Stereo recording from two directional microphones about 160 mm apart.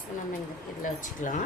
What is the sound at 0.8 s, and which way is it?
Speech, 55° left (ahead or behind).